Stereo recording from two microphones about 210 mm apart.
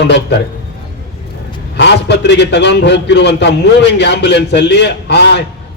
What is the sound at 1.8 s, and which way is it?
A man's voice, 55° left (ahead or behind).